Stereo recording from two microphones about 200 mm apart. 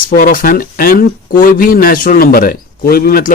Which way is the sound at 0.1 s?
45° left (ahead or behind).